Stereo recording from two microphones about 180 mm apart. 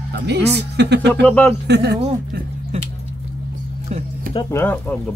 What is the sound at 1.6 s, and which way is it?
Speech, 70° right (ahead or behind).